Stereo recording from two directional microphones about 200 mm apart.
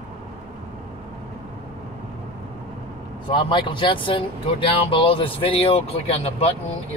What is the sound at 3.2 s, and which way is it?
Speech, 25° left (ahead or behind).